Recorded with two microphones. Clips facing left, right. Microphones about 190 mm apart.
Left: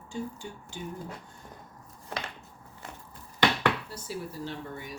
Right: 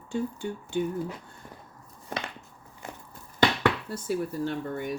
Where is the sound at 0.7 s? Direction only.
60° right (ahead or behind).